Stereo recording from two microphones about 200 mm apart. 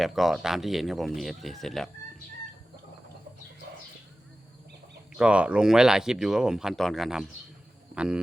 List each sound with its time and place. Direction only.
0.0 s speech: centre (ahead or behind)
5.1 s speech: 5° right (ahead or behind)